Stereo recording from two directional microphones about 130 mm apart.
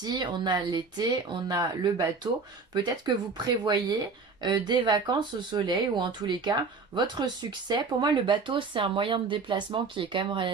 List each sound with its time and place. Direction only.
0.0 s speech: 35° right (ahead or behind)